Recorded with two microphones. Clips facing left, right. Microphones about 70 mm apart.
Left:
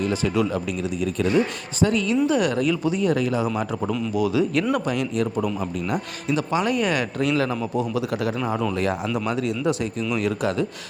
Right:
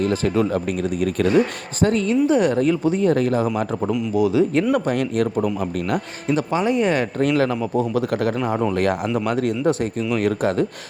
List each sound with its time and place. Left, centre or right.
0.0 s speech: right
1.8 s speech: right
4.1 s speech: right
4.7 s speech: right